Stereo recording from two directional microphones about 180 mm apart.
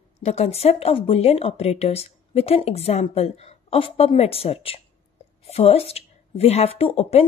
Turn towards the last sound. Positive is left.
turn(degrees=35)  # may be behind; listen again after turning